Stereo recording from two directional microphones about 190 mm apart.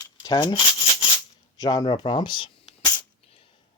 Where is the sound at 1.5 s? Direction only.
20° left (ahead or behind).